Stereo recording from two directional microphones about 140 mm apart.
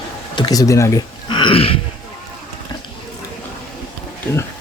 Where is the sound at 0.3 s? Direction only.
30° left (ahead or behind).